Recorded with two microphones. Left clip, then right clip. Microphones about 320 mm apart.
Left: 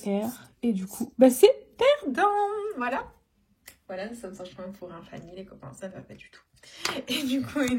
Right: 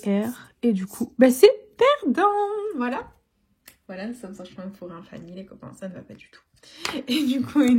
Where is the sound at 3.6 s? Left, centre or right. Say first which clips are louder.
Even; centre.